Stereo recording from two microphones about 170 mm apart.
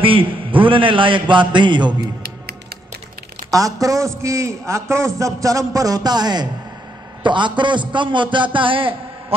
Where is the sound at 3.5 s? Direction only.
20° right (ahead or behind).